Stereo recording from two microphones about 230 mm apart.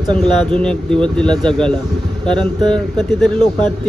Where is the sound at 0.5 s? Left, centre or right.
Centre.